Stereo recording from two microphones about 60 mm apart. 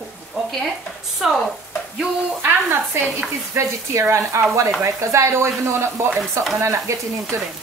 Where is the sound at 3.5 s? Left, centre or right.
Right.